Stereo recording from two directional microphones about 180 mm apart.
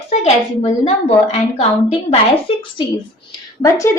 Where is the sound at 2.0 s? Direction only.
30° left (ahead or behind).